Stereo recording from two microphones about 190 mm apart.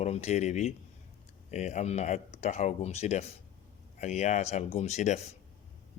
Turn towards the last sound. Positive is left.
turn(degrees=35)  # may be behind; listen again after turning